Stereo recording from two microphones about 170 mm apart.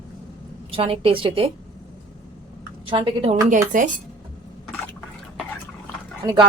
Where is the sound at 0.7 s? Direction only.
35° right (ahead or behind).